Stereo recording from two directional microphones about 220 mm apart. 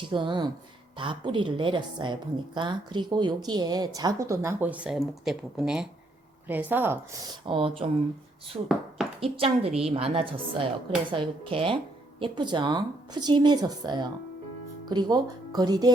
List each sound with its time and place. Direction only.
0.1 s a woman's voice: 20° right (ahead or behind)